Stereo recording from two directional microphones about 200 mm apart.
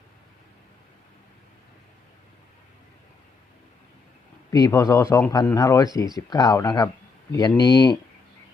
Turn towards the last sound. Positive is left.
turn(degrees=20)  # may be behind; listen again after turning